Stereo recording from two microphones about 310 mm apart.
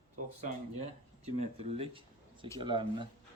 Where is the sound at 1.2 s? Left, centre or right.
Centre.